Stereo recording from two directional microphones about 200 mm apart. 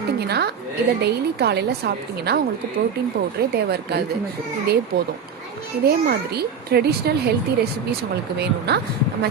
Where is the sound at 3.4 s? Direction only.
55° right (ahead or behind).